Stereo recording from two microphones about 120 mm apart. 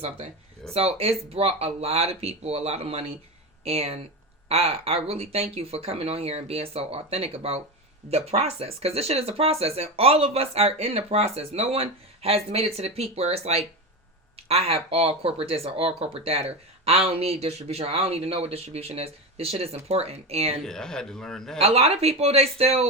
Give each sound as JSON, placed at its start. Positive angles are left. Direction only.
{"t": 0.7, "sound": "speech", "side_deg": -55}
{"t": 20.7, "sound": "a man's voice", "side_deg": 5}
{"t": 21.6, "sound": "speech", "side_deg": -55}